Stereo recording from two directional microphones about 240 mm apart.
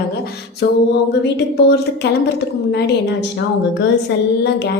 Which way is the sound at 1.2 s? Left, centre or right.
Left.